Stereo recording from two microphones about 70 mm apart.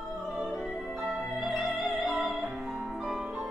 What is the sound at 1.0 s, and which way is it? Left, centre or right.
Music, centre.